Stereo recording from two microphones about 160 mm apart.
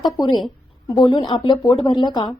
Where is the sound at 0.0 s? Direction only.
30° left (ahead or behind).